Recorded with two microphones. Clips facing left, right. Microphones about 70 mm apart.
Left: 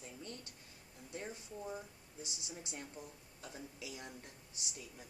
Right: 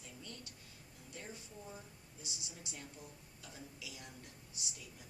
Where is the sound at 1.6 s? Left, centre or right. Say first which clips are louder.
Left 6 dB; left.